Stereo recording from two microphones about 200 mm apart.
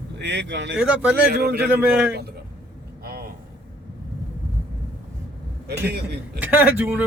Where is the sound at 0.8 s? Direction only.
5° right (ahead or behind).